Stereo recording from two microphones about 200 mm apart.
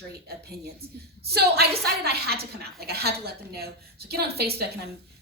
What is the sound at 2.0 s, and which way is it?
A woman's voice, 50° right (ahead or behind).